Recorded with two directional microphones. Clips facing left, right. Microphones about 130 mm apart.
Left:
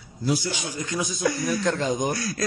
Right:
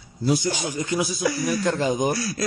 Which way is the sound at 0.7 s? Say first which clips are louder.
Right 4 dB; 15° right (ahead or behind).